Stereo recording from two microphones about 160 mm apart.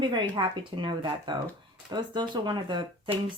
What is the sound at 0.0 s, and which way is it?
Speech, 30° right (ahead or behind).